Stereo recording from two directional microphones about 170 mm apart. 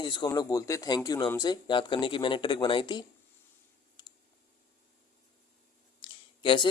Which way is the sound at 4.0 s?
25° left (ahead or behind).